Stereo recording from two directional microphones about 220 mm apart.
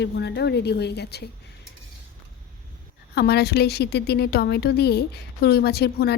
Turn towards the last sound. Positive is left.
turn(degrees=45)  # may be behind; listen again after turning